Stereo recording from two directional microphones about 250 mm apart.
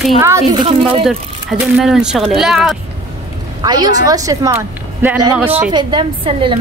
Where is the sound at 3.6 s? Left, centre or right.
Centre.